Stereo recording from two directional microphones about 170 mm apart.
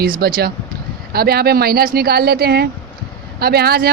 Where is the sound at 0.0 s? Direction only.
60° right (ahead or behind).